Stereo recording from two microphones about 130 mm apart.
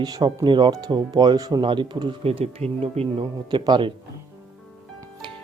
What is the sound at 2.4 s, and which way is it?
Speech, 55° right (ahead or behind).